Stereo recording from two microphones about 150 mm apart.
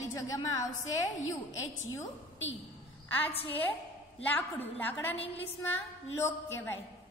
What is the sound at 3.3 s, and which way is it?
Speech, 40° left (ahead or behind).